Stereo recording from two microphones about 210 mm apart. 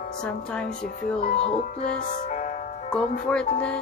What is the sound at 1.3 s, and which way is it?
Music, 30° left (ahead or behind).